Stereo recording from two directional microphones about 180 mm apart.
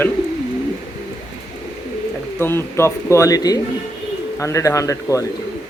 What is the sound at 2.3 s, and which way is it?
Speech, 10° left (ahead or behind).